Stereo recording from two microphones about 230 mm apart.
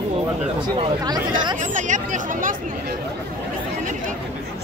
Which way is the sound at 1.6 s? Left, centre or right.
Right.